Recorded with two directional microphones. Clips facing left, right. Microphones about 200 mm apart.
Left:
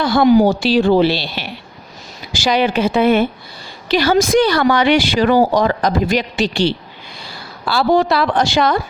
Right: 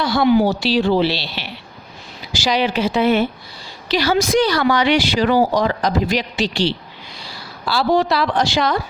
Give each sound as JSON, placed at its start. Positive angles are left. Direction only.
{"t": 0.0, "sound": "a woman's voice", "side_deg": 50}